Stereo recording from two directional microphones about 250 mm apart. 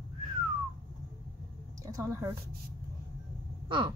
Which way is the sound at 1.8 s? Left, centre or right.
Centre.